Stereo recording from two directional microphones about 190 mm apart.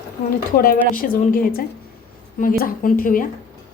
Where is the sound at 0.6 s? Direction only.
50° left (ahead or behind).